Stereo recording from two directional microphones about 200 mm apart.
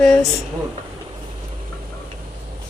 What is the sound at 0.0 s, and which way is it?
Speech, centre (ahead or behind).